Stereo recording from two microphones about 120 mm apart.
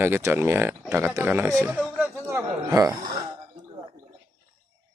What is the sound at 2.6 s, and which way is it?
Speech, 30° right (ahead or behind).